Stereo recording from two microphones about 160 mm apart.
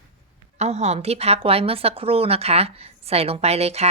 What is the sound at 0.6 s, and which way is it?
Speech, 45° right (ahead or behind).